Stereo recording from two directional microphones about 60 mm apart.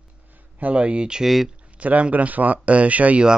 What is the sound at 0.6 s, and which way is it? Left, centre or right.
Speech, right.